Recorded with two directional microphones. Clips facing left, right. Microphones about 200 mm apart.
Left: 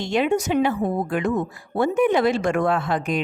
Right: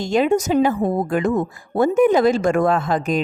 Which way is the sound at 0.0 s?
40° right (ahead or behind).